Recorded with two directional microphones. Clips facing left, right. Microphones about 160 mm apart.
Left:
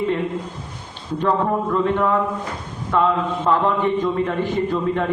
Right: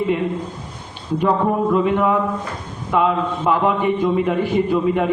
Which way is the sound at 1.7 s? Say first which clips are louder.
Right 1 dB; 10° right (ahead or behind).